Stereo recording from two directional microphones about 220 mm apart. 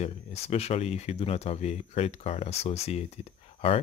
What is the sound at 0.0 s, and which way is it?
Speech, 30° left (ahead or behind).